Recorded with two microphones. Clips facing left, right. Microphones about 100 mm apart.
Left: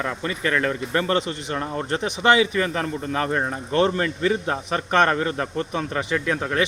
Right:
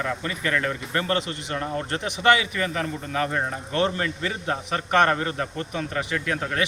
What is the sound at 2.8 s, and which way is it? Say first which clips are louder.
Speech: left 2 dB; 40° left (ahead or behind).